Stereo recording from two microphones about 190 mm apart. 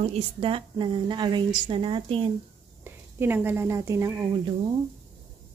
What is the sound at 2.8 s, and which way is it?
Speech, 10° right (ahead or behind).